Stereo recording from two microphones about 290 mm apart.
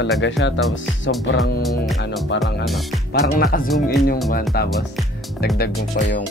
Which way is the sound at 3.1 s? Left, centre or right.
Left.